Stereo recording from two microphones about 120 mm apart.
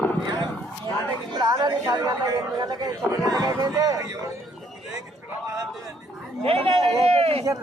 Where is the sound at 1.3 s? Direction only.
35° right (ahead or behind).